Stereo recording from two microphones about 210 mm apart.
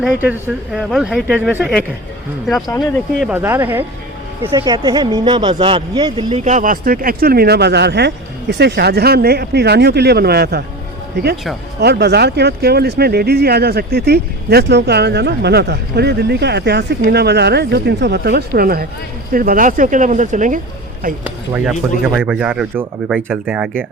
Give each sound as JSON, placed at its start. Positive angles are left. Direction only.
{"t": 0.0, "sound": "speech", "side_deg": -10}
{"t": 3.2, "sound": "speech", "side_deg": -5}
{"t": 6.4, "sound": "speech", "side_deg": -35}
{"t": 11.8, "sound": "speech", "side_deg": -50}
{"t": 21.2, "sound": "speech", "side_deg": -5}